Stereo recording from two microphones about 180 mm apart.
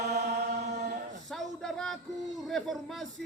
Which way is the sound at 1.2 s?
Centre (ahead or behind).